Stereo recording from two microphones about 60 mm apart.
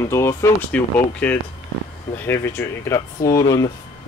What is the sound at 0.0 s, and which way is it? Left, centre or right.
Speech, left.